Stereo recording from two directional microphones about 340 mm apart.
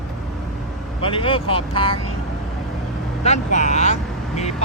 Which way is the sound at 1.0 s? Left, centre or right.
Centre.